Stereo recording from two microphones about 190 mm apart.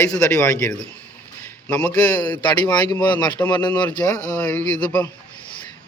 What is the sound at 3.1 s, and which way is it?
Speech, 20° left (ahead or behind).